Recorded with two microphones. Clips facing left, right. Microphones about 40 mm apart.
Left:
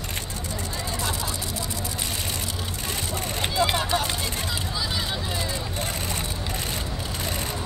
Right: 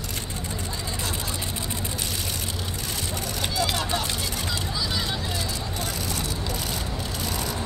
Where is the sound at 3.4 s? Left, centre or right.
Left.